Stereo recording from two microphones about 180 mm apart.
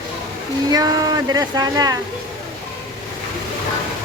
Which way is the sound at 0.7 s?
20° right (ahead or behind).